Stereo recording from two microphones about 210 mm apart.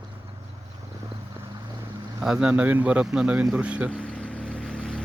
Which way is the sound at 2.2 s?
5° right (ahead or behind).